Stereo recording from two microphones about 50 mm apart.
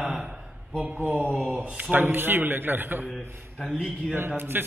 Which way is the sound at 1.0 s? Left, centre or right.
Right.